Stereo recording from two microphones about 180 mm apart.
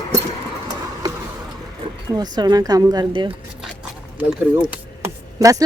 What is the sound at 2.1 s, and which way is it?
Speech, 20° right (ahead or behind).